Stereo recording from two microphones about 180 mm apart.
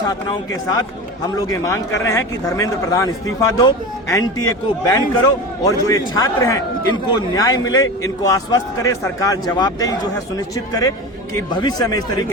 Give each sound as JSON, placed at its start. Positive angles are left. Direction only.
{"t": 0.1, "sound": "a man's voice", "side_deg": 20}
{"t": 11.5, "sound": "a man's voice", "side_deg": 25}